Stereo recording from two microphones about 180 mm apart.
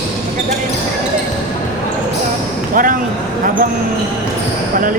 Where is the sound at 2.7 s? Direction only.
50° right (ahead or behind).